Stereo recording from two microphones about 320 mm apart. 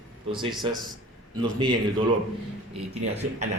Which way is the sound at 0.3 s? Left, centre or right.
Centre.